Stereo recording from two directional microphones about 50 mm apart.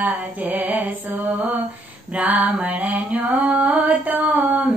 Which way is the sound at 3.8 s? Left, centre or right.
Right.